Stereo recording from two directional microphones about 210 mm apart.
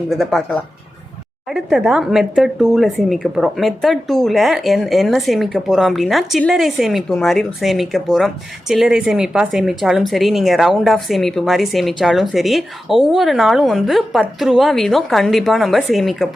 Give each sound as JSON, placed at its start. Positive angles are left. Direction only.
{"t": 0.1, "sound": "speech", "side_deg": 0}